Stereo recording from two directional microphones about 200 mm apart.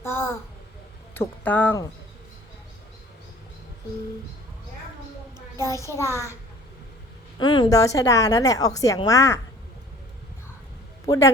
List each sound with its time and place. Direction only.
0.0 s a sound: 10° left (ahead or behind)
1.1 s speech: 10° left (ahead or behind)
5.8 s a woman's voice: 15° left (ahead or behind)
7.3 s a woman's voice: 20° left (ahead or behind)
11.0 s speech: 15° left (ahead or behind)